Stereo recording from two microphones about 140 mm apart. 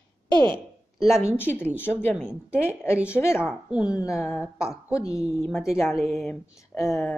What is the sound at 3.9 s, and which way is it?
Speech, 25° left (ahead or behind).